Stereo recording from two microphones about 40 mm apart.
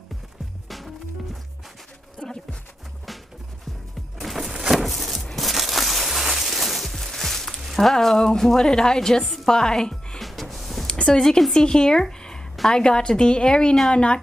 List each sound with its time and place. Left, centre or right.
0.7 s music: centre
2.2 s a sound: left
4.2 s a sound: centre
7.7 s a woman's voice: centre
9.2 s music: centre
9.5 s speech: centre
10.1 s music: centre
10.9 s a sound: left
11.1 s a woman's voice: centre; by 14.2 s left